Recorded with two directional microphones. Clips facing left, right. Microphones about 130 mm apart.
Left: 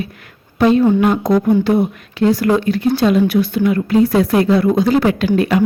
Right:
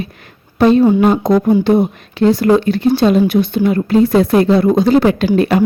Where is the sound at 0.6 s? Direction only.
35° right (ahead or behind).